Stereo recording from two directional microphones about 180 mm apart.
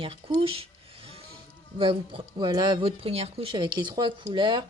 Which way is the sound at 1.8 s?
30° right (ahead or behind).